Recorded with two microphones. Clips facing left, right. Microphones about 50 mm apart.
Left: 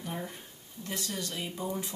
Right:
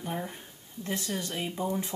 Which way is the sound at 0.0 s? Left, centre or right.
Right.